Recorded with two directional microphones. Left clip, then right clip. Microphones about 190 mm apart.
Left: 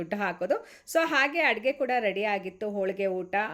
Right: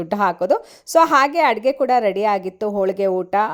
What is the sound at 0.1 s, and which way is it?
Speech, 40° right (ahead or behind).